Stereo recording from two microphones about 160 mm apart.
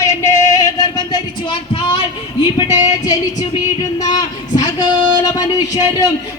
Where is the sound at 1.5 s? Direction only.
30° left (ahead or behind).